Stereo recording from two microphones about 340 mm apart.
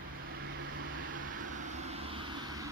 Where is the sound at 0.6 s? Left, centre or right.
Right; by 2.6 s centre.